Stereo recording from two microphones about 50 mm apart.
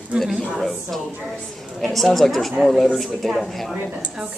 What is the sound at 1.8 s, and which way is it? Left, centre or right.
Speech, centre.